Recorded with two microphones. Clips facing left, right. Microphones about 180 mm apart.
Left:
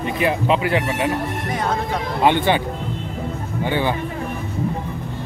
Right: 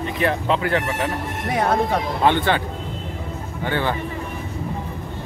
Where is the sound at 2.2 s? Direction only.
15° left (ahead or behind).